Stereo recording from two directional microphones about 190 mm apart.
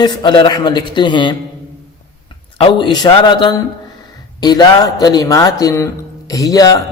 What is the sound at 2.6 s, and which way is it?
A man's voice, 25° left (ahead or behind).